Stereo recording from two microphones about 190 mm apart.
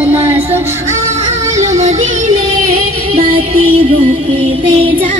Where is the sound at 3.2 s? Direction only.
30° right (ahead or behind).